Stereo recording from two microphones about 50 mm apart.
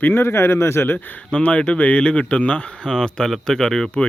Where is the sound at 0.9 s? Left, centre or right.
Left.